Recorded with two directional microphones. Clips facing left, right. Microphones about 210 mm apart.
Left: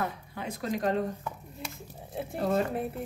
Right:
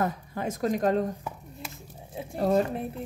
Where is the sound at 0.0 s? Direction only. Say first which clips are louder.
Right 5 dB; 45° right (ahead or behind).